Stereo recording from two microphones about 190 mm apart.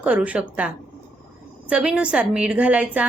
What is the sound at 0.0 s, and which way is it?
Speech, 5° right (ahead or behind).